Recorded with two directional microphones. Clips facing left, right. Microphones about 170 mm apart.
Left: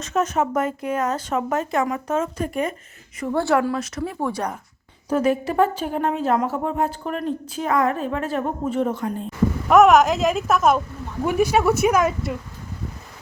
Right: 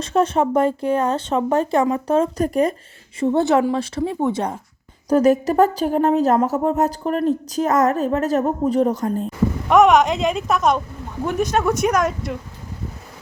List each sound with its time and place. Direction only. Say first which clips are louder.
0.0 s speech: right 4 dB; 30° right (ahead or behind)
3.2 s a woman's voice: right 4 dB; 25° right (ahead or behind)
5.0 s speech: right 5 dB; 40° right (ahead or behind)
9.6 s speech: even; centre (ahead or behind)